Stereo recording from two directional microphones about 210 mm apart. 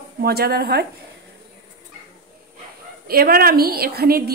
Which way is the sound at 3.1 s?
45° right (ahead or behind).